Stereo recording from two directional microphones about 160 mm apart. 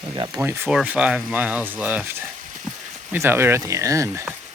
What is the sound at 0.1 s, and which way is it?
Speech, 25° right (ahead or behind).